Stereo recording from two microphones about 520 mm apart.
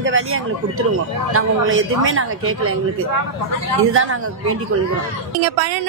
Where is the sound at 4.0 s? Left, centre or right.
Right.